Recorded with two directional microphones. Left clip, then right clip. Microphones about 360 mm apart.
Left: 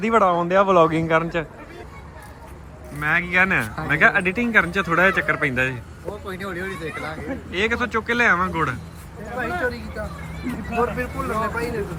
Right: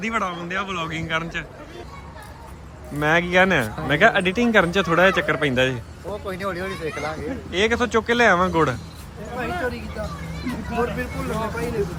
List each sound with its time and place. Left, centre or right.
0.0 s a man's voice: centre
3.0 s a man's voice: centre
6.2 s speech: centre
7.5 s a man's voice: centre
10.8 s a man's voice: centre